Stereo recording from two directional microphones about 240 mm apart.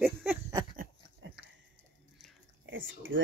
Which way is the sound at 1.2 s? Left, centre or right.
Right.